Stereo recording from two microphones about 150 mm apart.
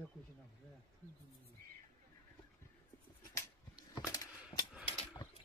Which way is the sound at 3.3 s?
25° left (ahead or behind).